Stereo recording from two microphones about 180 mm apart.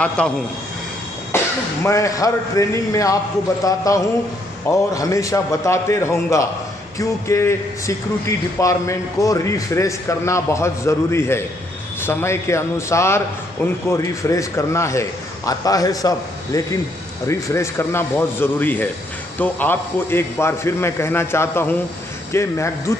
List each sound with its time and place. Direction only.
0.2 s a man's voice: 5° left (ahead or behind)